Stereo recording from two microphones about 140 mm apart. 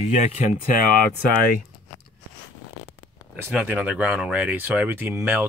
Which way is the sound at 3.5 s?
10° right (ahead or behind).